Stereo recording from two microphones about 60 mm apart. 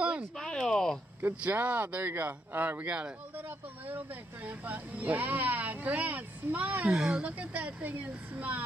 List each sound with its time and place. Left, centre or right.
0.4 s a sound: centre
1.4 s speech: right
6.9 s speech: centre
7.2 s speech: right